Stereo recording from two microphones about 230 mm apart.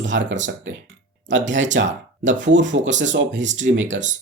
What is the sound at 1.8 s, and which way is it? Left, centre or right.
Speech, right.